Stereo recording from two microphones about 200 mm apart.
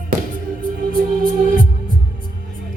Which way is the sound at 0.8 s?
45° right (ahead or behind).